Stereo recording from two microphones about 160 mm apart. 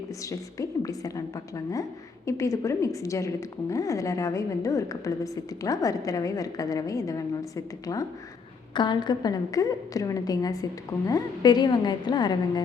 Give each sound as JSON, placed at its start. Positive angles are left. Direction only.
{"t": 0.3, "sound": "a woman's voice", "side_deg": 20}